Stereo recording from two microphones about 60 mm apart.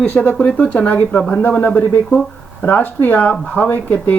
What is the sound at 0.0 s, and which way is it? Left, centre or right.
Speech, left.